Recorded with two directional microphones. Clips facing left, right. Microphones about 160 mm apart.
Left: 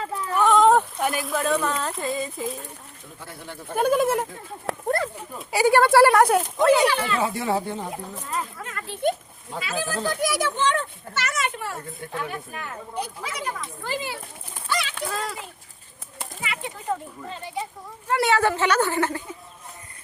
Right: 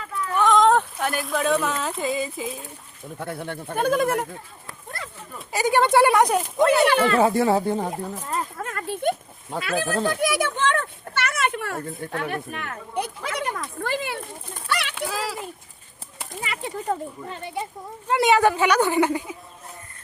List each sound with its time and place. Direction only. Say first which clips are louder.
0.0 s a sound: left 1 dB; 30° left (ahead or behind)
0.3 s a sound: left 1 dB; 10° left (ahead or behind)
1.8 s speech: right 2 dB; centre (ahead or behind)
3.2 s a child's voice: right 9 dB; 55° right (ahead or behind)
3.8 s speech: left 1 dB; 5° left (ahead or behind)
5.4 s speech: left 2 dB; 10° left (ahead or behind)
6.9 s speech: right 6 dB; 55° right (ahead or behind)
8.3 s a sound: even; 45° right (ahead or behind)
9.6 s a child's voice: right 4 dB; 55° right (ahead or behind)
14.7 s bird: even; 65° right (ahead or behind)
14.9 s speech: right 1 dB; 5° right (ahead or behind)
16.4 s speech: right 2 dB; 35° right (ahead or behind)
18.1 s speech: right 3 dB; 15° right (ahead or behind)